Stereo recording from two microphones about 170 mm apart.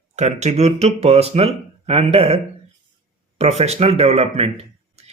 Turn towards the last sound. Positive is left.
turn(degrees=-35)  # may be behind; listen again after turning